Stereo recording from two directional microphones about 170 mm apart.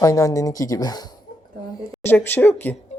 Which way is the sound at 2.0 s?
10° left (ahead or behind).